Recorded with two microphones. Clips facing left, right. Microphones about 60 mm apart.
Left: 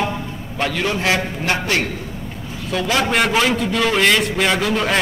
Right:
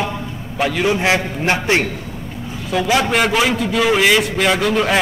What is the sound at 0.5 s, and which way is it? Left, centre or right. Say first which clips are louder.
A man's voice: right 4 dB; centre.